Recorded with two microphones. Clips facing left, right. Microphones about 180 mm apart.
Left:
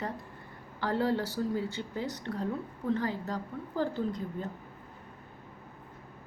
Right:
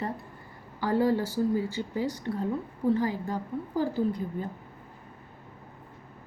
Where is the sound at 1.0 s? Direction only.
65° left (ahead or behind).